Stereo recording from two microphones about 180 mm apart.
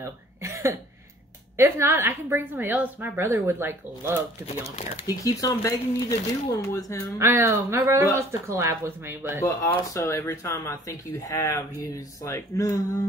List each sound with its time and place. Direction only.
0.0 s cough: 15° right (ahead or behind)
1.6 s a woman's voice: 15° right (ahead or behind)
4.6 s speech: 35° left (ahead or behind)
5.0 s speech: 20° left (ahead or behind)
7.2 s a woman's voice: 15° right (ahead or behind)
9.4 s speech: 15° left (ahead or behind)